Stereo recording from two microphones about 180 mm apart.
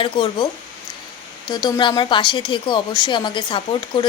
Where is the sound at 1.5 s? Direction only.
25° left (ahead or behind).